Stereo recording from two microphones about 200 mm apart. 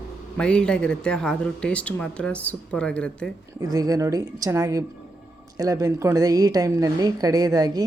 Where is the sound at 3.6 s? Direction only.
20° right (ahead or behind).